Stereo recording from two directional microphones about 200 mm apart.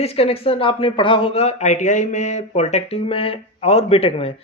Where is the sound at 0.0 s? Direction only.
30° left (ahead or behind).